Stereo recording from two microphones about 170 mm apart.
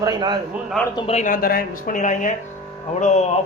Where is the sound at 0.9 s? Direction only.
35° left (ahead or behind).